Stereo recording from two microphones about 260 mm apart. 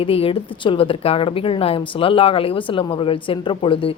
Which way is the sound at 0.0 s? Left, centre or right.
Left.